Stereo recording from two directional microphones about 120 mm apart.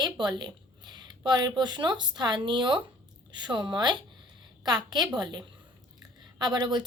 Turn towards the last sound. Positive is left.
turn(degrees=-35)  # may be behind; listen again after turning